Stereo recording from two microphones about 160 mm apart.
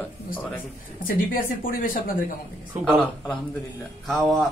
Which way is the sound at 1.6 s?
60° left (ahead or behind).